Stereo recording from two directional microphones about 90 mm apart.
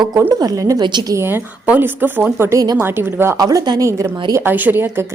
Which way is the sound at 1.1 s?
25° right (ahead or behind).